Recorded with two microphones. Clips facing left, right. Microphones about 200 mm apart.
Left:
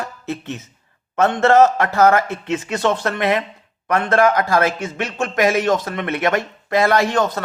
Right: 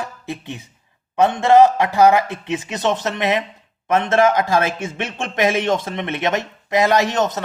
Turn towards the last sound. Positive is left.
turn(degrees=-20)  # may be behind; listen again after turning